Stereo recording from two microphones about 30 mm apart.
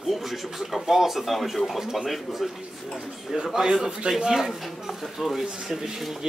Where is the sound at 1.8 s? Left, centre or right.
Centre.